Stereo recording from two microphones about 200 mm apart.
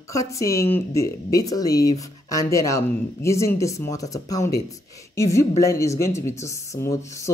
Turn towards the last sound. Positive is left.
turn(degrees=15)  # may be behind; listen again after turning